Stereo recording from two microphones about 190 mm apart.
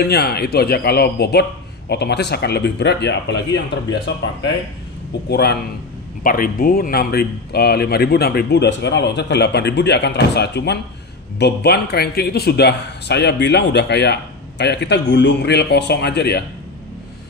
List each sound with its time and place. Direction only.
0.0 s speech: 55° left (ahead or behind)
5.3 s speech: 60° left (ahead or behind)
6.2 s speech: 45° left (ahead or behind)